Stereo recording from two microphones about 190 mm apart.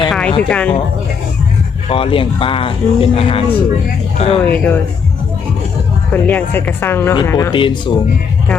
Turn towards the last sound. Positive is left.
turn(degrees=25)  # may be behind; listen again after turning